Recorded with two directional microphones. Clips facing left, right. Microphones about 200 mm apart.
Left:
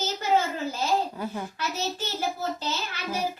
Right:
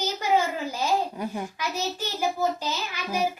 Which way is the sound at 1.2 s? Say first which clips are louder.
Right 1 dB; 15° right (ahead or behind).